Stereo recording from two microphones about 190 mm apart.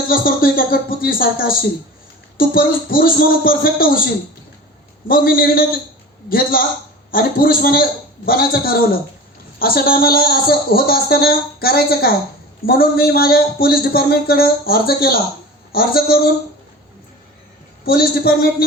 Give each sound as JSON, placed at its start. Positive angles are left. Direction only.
{"t": 0.1, "sound": "speech", "side_deg": 50}
{"t": 5.0, "sound": "speech", "side_deg": 50}
{"t": 17.8, "sound": "speech", "side_deg": 50}